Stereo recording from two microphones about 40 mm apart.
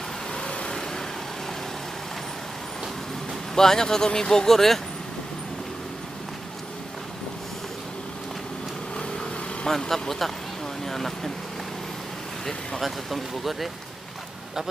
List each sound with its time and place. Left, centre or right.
0.3 s vehicle: left
3.5 s speech: centre
9.7 s speech: centre
12.8 s speech: centre